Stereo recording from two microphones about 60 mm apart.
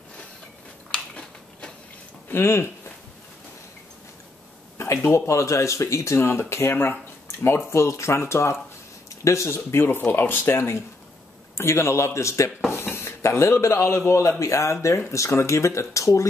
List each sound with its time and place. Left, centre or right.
0.9 s a sound: centre
2.2 s speech: left
5.0 s speech: left